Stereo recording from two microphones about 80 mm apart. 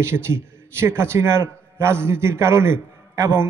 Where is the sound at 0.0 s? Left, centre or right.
Right.